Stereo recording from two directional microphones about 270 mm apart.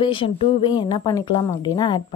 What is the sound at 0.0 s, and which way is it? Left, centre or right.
Speech, centre.